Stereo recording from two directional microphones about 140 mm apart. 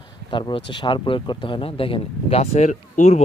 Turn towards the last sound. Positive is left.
turn(degrees=55)  # may be behind; listen again after turning